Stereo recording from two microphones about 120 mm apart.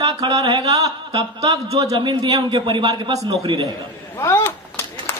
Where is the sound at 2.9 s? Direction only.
30° right (ahead or behind).